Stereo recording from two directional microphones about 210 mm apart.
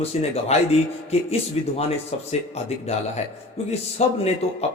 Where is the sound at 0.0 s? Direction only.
30° left (ahead or behind).